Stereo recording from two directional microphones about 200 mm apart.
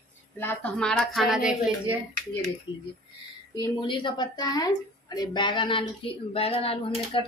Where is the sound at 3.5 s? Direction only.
25° left (ahead or behind).